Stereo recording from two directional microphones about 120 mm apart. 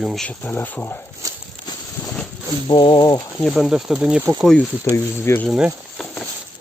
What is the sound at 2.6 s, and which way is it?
Speech, 40° left (ahead or behind).